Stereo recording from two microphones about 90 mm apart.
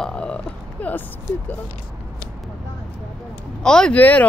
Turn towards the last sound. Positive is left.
turn(degrees=15)  # may be behind; listen again after turning